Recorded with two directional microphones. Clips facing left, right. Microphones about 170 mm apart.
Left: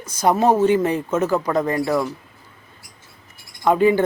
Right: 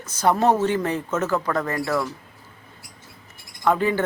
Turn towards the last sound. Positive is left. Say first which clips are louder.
# left 5 dB
turn(degrees=15)  # may be behind; listen again after turning